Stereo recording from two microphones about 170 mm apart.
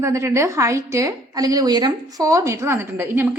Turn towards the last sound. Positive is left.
turn(degrees=-15)  # may be behind; listen again after turning